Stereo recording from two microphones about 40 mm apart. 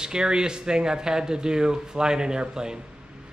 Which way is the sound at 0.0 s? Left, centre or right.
Centre.